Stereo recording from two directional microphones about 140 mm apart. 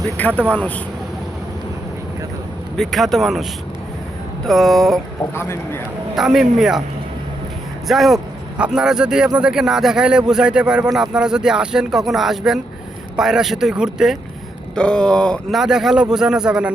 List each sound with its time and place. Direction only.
0.2 s speech: 10° left (ahead or behind)
2.7 s speech: centre (ahead or behind)
4.4 s speech: centre (ahead or behind)
5.3 s speech: 20° left (ahead or behind)
6.1 s speech: 5° right (ahead or behind)
7.9 s speech: centre (ahead or behind)
14.8 s speech: 5° left (ahead or behind)